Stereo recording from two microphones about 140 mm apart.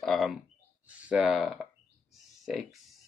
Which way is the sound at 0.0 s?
Centre (ahead or behind).